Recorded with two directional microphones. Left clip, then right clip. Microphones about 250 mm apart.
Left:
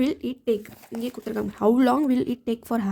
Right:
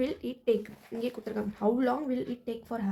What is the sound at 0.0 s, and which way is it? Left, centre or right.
Speech, left.